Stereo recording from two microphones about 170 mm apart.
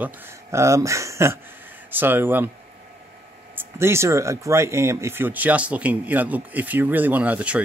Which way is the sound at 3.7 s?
15° right (ahead or behind).